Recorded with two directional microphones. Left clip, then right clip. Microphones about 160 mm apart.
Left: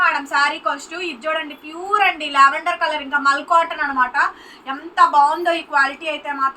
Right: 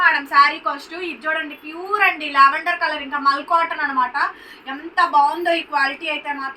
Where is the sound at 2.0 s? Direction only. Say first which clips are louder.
Even; 15° left (ahead or behind).